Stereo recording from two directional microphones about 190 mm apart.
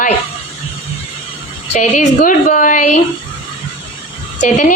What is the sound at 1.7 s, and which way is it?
Speech, 40° left (ahead or behind).